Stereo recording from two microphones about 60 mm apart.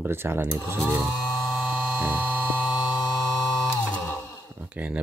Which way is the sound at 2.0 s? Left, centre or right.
Right.